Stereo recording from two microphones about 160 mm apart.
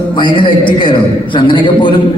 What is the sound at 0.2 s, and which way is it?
A man's voice, 30° left (ahead or behind).